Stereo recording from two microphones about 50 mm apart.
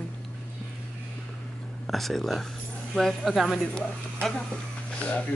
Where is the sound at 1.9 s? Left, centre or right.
Centre.